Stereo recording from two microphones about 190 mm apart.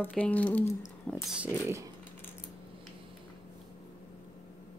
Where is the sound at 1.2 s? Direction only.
5° right (ahead or behind).